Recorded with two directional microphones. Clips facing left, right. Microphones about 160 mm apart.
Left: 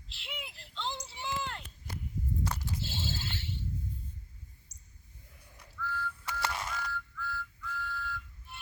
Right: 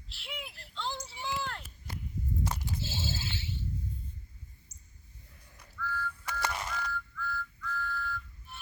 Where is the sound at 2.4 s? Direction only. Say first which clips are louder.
Right 2 dB; 20° right (ahead or behind).